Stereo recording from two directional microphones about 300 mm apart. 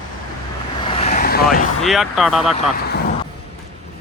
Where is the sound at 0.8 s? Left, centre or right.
Centre.